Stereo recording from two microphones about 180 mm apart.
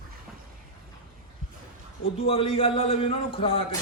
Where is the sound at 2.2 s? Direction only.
35° left (ahead or behind).